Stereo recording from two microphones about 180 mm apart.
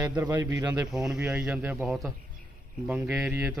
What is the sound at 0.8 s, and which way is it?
A man's voice, 5° right (ahead or behind).